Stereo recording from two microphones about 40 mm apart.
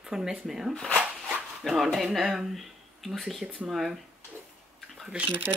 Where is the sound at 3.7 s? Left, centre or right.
Centre.